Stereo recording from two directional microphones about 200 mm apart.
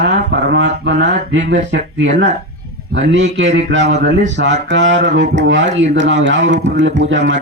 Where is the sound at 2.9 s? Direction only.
65° right (ahead or behind).